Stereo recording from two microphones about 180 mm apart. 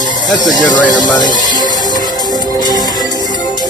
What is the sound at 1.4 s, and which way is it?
Music, 20° left (ahead or behind).